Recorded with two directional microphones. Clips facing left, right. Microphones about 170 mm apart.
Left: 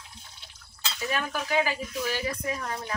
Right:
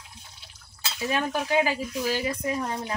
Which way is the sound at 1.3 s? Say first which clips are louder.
Right 2 dB; 20° right (ahead or behind).